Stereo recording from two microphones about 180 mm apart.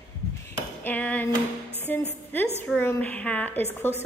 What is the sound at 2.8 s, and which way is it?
A woman's voice, 10° left (ahead or behind).